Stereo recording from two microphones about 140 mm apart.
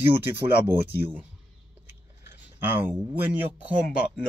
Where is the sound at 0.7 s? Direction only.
15° right (ahead or behind).